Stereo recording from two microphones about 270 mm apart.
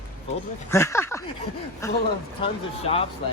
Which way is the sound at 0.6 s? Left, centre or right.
Centre.